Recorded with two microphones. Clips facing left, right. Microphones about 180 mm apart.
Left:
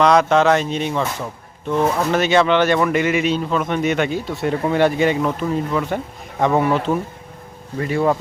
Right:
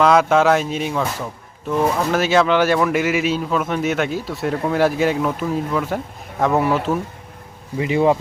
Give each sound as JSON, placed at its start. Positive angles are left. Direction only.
{"t": 0.0, "sound": "speech", "side_deg": -5}
{"t": 7.8, "sound": "speech", "side_deg": -15}